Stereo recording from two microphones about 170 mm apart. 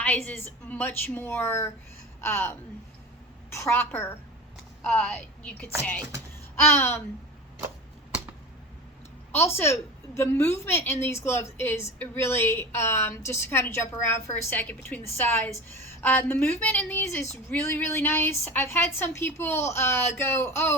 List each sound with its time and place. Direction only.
0.0 s a woman's voice: 10° left (ahead or behind)
9.3 s a woman's voice: 15° left (ahead or behind)